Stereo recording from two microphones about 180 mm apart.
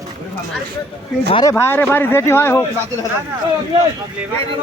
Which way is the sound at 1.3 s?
20° left (ahead or behind).